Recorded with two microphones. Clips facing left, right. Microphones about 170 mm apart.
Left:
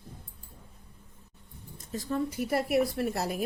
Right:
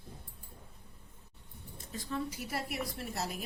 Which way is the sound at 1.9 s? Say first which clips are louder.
Left 7 dB; 45° left (ahead or behind).